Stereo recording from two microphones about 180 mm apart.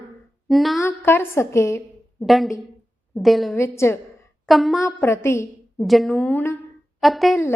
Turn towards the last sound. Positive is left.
turn(degrees=0)  # may be behind; listen again after turning